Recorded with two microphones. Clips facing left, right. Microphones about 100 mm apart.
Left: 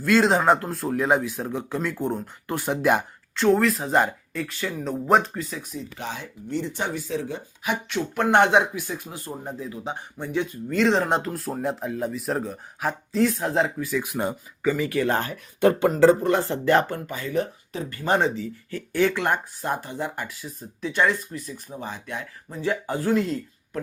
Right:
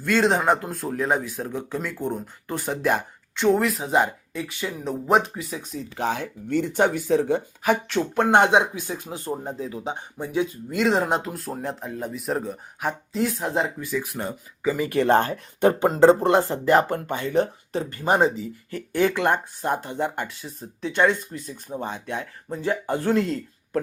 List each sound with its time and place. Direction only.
0.0 s speech: centre (ahead or behind)
3.3 s speech: 5° right (ahead or behind)
5.5 s speech: 30° right (ahead or behind)
6.1 s speech: 60° right (ahead or behind)
7.6 s speech: 40° right (ahead or behind); by 14.0 s 5° right (ahead or behind)
14.6 s speech: 25° right (ahead or behind)
15.0 s speech: 40° right (ahead or behind)
15.6 s speech: 25° right (ahead or behind)
16.7 s speech: 30° right (ahead or behind)
17.8 s speech: 20° right (ahead or behind)
23.0 s speech: 55° right (ahead or behind)